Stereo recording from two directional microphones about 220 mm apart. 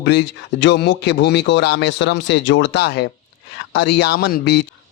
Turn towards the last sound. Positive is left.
turn(degrees=50)  # may be behind; listen again after turning